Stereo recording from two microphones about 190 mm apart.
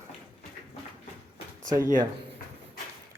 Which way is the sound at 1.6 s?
20° right (ahead or behind).